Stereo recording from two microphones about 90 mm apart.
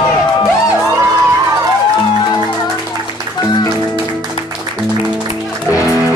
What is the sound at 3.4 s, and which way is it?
Music, 55° left (ahead or behind).